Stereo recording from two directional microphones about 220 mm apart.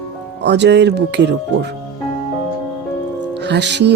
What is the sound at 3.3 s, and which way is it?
Speech, 50° right (ahead or behind).